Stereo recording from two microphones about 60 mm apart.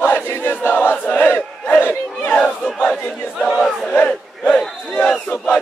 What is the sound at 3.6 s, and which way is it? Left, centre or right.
Battle cry, centre.